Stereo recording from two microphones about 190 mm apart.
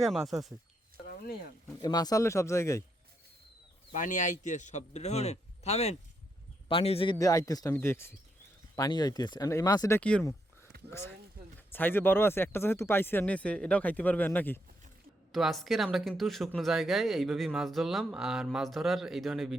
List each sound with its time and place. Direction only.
0.0 s a woman's voice: centre (ahead or behind)
1.8 s speech: 20° left (ahead or behind)
3.9 s a man's voice: 40° left (ahead or behind); by 10.0 s 20° left (ahead or behind)
10.0 s a woman's voice: 5° left (ahead or behind)
11.7 s speech: 10° left (ahead or behind)
15.3 s a woman's voice: centre (ahead or behind)